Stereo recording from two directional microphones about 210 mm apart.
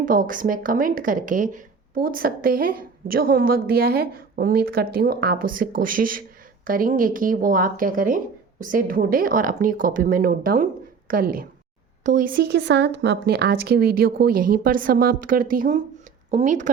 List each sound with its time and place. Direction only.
0.0 s speech: 40° right (ahead or behind)